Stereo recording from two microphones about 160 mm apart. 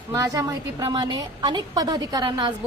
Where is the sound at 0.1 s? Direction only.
20° right (ahead or behind).